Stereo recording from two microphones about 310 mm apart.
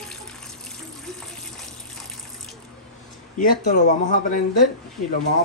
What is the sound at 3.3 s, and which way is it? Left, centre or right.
Speech, left.